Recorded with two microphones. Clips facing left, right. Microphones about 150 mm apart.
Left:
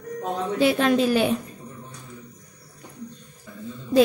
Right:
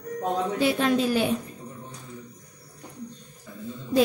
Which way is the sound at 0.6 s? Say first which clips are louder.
Left 5 dB; 75° left (ahead or behind).